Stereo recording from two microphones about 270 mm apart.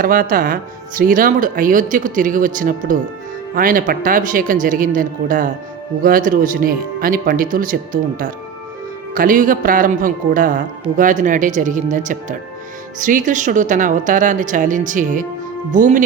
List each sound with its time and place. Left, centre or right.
0.0 s speech: right
9.1 s speech: right